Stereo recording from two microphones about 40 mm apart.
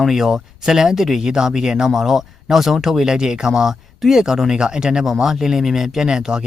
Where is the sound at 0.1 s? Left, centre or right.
Centre.